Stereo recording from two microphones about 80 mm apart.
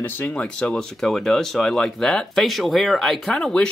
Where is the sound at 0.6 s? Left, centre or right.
Centre.